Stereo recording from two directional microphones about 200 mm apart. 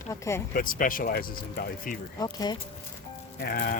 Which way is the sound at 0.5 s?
45° left (ahead or behind).